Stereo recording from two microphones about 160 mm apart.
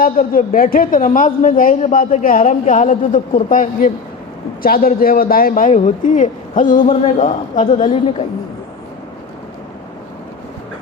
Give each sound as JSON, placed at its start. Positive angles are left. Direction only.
{"t": 0.0, "sound": "a woman's voice", "side_deg": 60}